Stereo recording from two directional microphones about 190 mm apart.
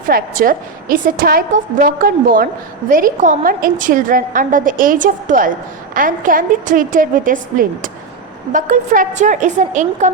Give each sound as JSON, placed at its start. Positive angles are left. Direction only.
{"t": 0.1, "sound": "a woman's voice", "side_deg": -45}